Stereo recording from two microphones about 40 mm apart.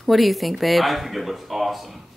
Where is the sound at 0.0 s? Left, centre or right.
Centre.